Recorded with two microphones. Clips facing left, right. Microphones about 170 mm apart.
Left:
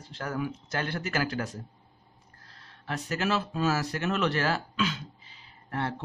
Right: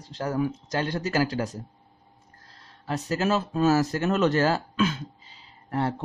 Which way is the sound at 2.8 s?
35° right (ahead or behind).